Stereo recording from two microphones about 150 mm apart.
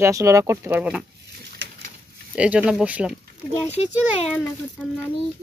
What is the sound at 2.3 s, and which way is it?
Speech, 10° right (ahead or behind).